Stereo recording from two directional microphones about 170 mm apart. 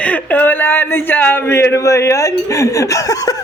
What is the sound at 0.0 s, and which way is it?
Speech, 10° left (ahead or behind).